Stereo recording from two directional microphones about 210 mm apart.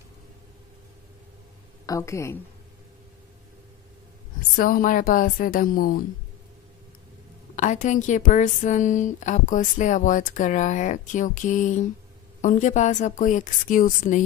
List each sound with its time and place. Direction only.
1.9 s a woman's voice: 15° left (ahead or behind)
4.6 s a woman's voice: 40° left (ahead or behind)
7.5 s a woman's voice: 35° left (ahead or behind)